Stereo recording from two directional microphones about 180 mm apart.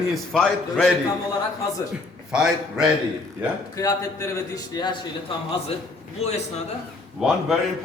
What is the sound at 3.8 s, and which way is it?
A man's voice, 15° left (ahead or behind).